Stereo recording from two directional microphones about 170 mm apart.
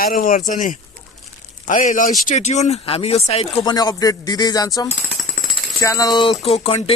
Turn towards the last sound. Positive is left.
turn(degrees=30)  # may be behind; listen again after turning